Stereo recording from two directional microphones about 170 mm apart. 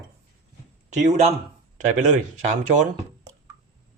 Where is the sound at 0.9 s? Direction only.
40° right (ahead or behind).